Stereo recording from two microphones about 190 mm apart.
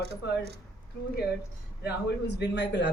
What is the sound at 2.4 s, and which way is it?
Speech, 65° left (ahead or behind).